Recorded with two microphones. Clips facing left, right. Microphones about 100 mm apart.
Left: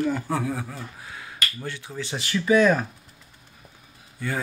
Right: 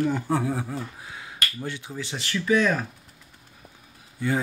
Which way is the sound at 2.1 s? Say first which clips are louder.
Left 3 dB; 10° left (ahead or behind).